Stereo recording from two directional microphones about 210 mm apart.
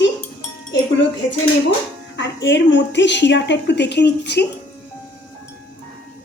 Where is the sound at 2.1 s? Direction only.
60° left (ahead or behind).